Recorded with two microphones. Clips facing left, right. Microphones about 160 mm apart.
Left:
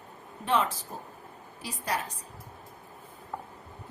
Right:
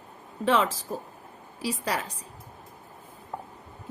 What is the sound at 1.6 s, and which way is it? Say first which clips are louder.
Speech: right 4 dB; 90° right.